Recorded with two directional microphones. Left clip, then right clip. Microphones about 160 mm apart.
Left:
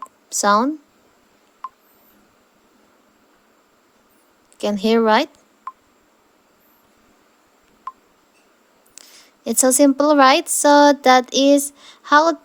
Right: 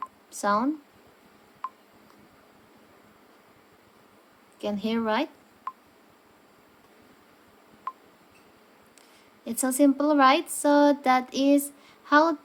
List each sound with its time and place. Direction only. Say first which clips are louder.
0.3 s a woman's voice: left 9 dB; 45° left (ahead or behind)
1.6 s telephone dialing: left 3 dB; 5° left (ahead or behind)
4.5 s a woman's voice: left 12 dB; 50° left (ahead or behind)
5.7 s telephone dialing: left 3 dB; centre (ahead or behind)
7.9 s telephone dialing: left 3 dB; 5° left (ahead or behind)
9.0 s speech: left 8 dB; 50° left (ahead or behind)